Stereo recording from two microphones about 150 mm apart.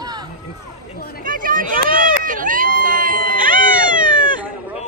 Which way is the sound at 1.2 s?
65° right (ahead or behind).